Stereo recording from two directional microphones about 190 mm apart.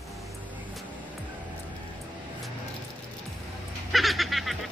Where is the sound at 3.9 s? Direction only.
Centre (ahead or behind).